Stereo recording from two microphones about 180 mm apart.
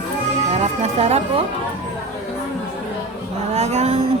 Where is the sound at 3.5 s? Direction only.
35° right (ahead or behind).